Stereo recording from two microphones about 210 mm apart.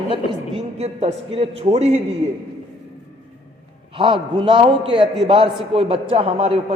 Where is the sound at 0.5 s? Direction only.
30° right (ahead or behind).